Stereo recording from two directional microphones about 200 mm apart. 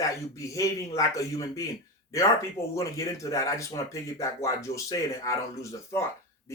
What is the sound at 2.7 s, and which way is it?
Speech, 15° left (ahead or behind).